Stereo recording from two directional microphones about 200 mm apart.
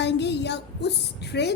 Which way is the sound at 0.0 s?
60° left (ahead or behind).